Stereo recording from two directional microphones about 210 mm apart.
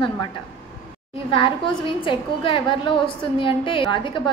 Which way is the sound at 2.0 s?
25° left (ahead or behind).